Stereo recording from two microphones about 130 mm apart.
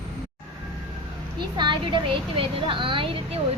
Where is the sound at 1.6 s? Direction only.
35° right (ahead or behind).